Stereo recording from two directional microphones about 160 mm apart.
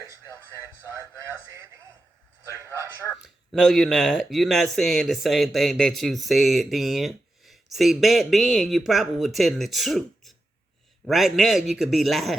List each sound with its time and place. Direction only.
0.6 s music: 20° right (ahead or behind)
3.2 s speech: centre (ahead or behind)